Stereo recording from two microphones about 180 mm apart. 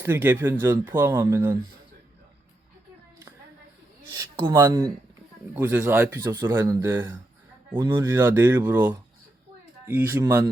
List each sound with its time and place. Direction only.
0.0 s speech: 10° right (ahead or behind)
4.4 s speech: 25° right (ahead or behind)
5.5 s speech: 10° right (ahead or behind)
9.8 s speech: 10° right (ahead or behind)